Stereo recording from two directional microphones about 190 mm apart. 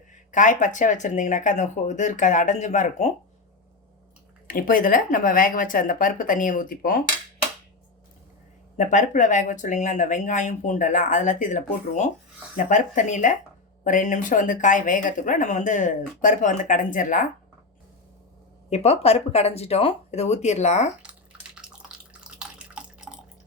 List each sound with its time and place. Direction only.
0.3 s speech: 40° left (ahead or behind)
4.4 s speech: 45° left (ahead or behind)
8.8 s speech: 40° left (ahead or behind)
18.7 s speech: 35° left (ahead or behind)
21.0 s bathtub: 5° right (ahead or behind)
22.4 s drip: 5° right (ahead or behind)